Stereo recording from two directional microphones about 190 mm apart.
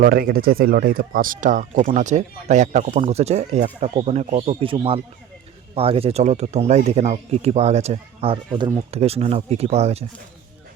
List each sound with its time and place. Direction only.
0.0 s speech: 50° right (ahead or behind); by 10.0 s 35° right (ahead or behind)